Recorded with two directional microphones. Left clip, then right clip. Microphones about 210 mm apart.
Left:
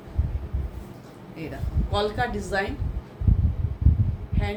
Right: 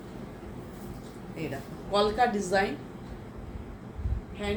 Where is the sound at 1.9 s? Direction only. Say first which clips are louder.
Right 1 dB; 20° left (ahead or behind).